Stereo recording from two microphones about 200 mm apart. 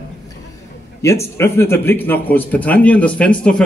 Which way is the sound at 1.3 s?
10° left (ahead or behind).